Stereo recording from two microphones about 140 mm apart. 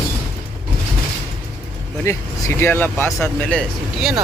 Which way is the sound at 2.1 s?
20° left (ahead or behind).